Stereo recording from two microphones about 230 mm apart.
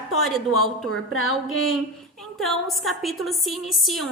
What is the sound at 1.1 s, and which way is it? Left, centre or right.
Music, left.